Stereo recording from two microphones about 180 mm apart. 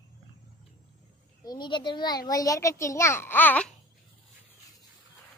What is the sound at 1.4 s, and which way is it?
A child's voice, 25° left (ahead or behind).